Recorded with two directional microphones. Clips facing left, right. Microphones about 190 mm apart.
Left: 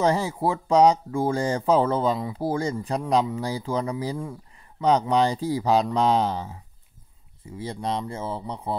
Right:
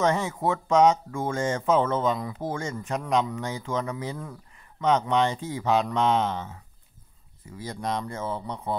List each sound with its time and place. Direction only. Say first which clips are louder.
0.0 s speech: left 2 dB; 35° left (ahead or behind)